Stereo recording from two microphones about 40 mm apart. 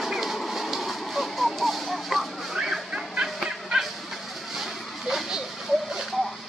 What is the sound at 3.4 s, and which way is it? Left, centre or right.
Dog, centre.